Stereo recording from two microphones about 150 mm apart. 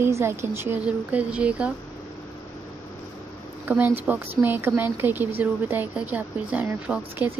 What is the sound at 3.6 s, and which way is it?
Speech, 10° right (ahead or behind).